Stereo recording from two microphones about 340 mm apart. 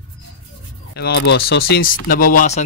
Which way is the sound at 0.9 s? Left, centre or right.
Left.